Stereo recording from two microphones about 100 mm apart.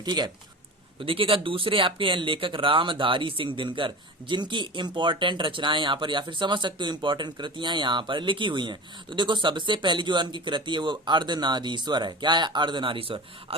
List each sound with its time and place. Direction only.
0.0 s speech: 45° right (ahead or behind)
0.9 s speech: 65° right (ahead or behind)